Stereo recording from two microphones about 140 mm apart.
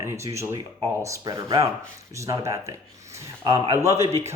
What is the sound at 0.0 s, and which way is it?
Speech, 20° right (ahead or behind).